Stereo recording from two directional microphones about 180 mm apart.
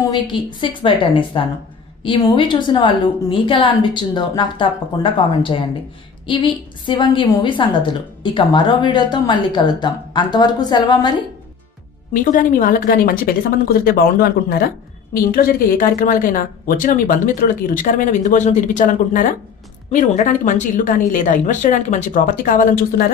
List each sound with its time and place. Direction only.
0.1 s a woman's voice: 30° left (ahead or behind)
12.1 s speech: 50° left (ahead or behind)